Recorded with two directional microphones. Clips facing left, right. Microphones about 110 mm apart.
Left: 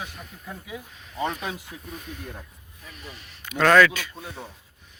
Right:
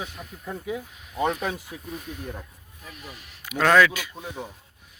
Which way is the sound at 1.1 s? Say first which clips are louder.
Right 3 dB; 5° right (ahead or behind).